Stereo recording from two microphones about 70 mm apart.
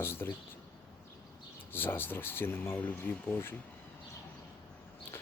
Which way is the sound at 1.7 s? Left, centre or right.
Left.